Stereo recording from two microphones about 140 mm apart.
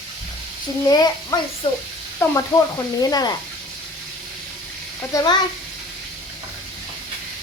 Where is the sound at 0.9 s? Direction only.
25° left (ahead or behind).